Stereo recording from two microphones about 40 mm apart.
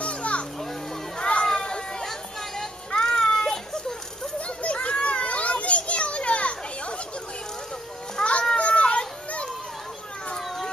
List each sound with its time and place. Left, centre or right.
0.0 s children playing: left
4.6 s children playing: left
8.2 s children playing: left